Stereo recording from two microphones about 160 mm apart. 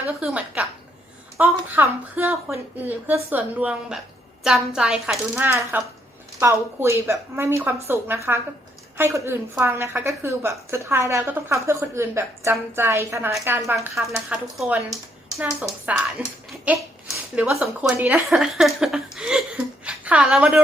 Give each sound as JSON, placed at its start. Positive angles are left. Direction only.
{"t": 0.0, "sound": "a woman's voice", "side_deg": -10}
{"t": 5.4, "sound": "a woman's voice", "side_deg": -15}
{"t": 13.9, "sound": "speech", "side_deg": 0}
{"t": 15.9, "sound": "a woman's voice", "side_deg": -10}